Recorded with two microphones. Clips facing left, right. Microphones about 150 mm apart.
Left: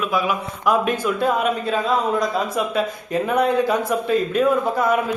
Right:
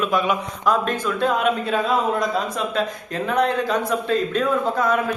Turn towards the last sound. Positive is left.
turn(degrees=10)  # may be behind; listen again after turning